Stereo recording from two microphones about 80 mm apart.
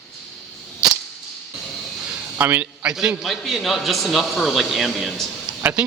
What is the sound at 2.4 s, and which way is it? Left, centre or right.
Speech, right.